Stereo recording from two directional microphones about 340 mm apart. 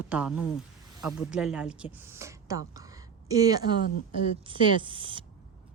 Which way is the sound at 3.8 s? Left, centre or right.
Left.